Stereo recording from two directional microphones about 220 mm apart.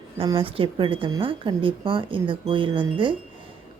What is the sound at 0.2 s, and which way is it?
Speech, 25° right (ahead or behind).